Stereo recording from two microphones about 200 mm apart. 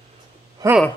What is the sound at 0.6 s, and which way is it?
Speech, 20° right (ahead or behind).